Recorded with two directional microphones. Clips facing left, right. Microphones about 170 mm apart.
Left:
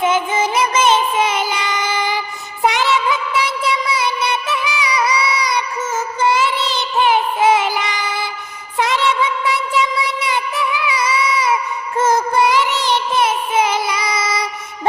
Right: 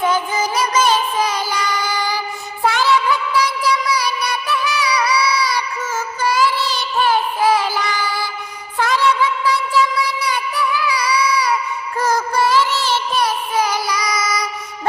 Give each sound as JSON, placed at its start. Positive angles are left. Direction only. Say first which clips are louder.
{"t": 0.0, "sound": "music", "louder": "left 2 dB", "side_deg": 25}
{"t": 6.1, "sound": "child singing", "louder": "left 1 dB", "side_deg": 25}
{"t": 8.8, "sound": "music", "louder": "even", "side_deg": 20}